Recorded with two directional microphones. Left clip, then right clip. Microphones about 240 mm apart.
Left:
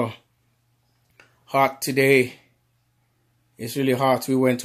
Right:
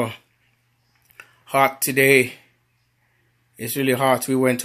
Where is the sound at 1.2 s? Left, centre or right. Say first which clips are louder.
Right 2 dB; centre.